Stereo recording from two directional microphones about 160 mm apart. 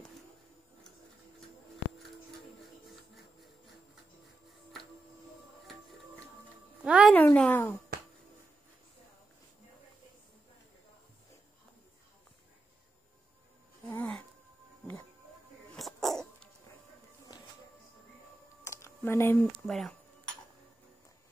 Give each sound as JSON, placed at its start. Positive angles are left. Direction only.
{"t": 6.8, "sound": "music", "side_deg": -5}
{"t": 7.2, "sound": "a woman's voice", "side_deg": 10}
{"t": 7.9, "sound": "finger snapping", "side_deg": -90}
{"t": 13.8, "sound": "a sound", "side_deg": 10}
{"t": 15.7, "sound": "dog", "side_deg": 0}
{"t": 17.3, "sound": "music", "side_deg": 25}
{"t": 18.6, "sound": "a sound", "side_deg": 15}
{"t": 19.6, "sound": "speech", "side_deg": 0}